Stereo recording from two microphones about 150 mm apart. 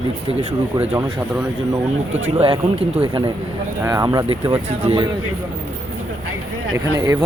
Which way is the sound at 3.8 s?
20° right (ahead or behind).